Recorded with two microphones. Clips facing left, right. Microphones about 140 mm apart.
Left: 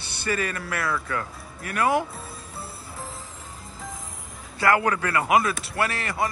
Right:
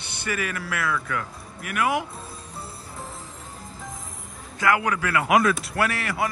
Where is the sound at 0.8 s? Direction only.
30° left (ahead or behind).